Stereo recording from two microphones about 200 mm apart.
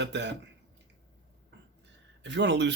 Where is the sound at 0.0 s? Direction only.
60° right (ahead or behind).